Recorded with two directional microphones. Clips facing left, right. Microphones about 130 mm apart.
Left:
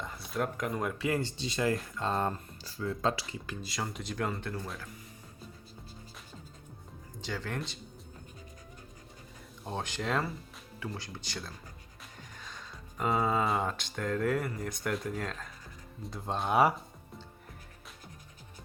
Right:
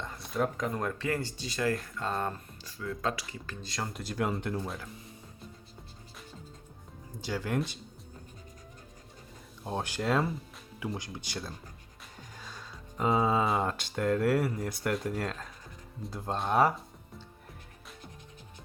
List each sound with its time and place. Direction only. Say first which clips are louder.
0.0 s speech: right 2 dB; centre (ahead or behind); by 3.2 s 25° left (ahead or behind)
3.4 s speech: left 2 dB; 15° left (ahead or behind)
3.7 s speech: right 1 dB; centre (ahead or behind)
4.4 s speech: right 4 dB; 15° right (ahead or behind)
7.2 s speech: right 5 dB; 10° right (ahead or behind)
9.6 s speech: right 3 dB; 10° right (ahead or behind)
10.8 s speech: right 3 dB; 15° right (ahead or behind)
12.4 s music: right 1 dB; 5° right (ahead or behind)
13.1 s speech: right 2 dB; 10° right (ahead or behind)
13.4 s speech: right 2 dB; centre (ahead or behind)